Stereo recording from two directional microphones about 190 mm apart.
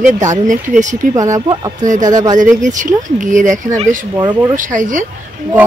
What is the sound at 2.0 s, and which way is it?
Speech, 20° right (ahead or behind).